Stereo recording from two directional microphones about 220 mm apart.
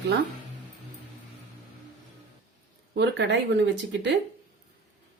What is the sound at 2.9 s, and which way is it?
Speech, 50° right (ahead or behind).